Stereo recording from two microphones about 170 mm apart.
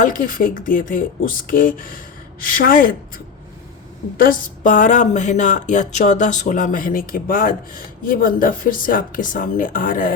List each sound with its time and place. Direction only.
0.0 s speech: 55° left (ahead or behind)
4.2 s speech: 50° left (ahead or behind)